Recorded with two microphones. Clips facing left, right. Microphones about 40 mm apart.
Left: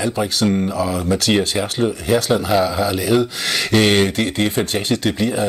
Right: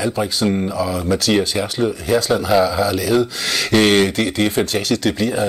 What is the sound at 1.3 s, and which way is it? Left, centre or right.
Speech, left.